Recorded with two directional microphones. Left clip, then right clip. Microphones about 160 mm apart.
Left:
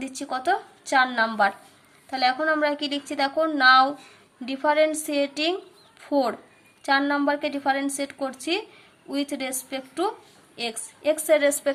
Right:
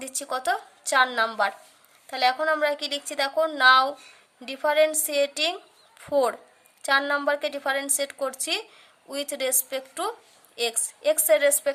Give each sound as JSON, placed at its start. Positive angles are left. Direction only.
{"t": 0.0, "sound": "a woman's voice", "side_deg": -40}